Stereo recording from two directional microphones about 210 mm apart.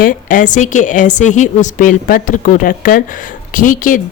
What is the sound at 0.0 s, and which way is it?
A woman's voice, 40° left (ahead or behind).